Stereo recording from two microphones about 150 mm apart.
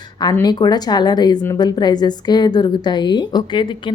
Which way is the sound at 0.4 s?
25° left (ahead or behind).